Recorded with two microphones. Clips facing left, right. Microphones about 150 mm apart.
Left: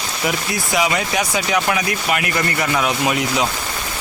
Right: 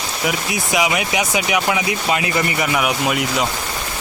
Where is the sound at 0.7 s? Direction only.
15° right (ahead or behind).